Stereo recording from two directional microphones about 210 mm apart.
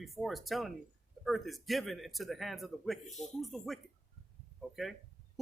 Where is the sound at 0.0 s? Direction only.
Centre (ahead or behind).